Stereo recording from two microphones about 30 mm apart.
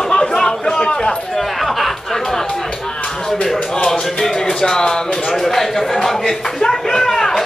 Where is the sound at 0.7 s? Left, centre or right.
Left.